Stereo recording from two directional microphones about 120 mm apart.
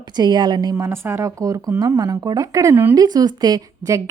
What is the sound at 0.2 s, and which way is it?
Speech, 35° right (ahead or behind).